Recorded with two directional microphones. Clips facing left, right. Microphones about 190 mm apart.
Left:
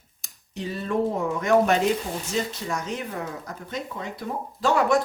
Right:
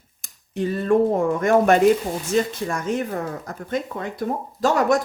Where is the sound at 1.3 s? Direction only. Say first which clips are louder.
Right 2 dB; 50° right (ahead or behind).